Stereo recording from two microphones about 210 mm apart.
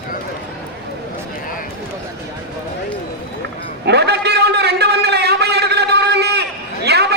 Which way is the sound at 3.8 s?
50° right (ahead or behind).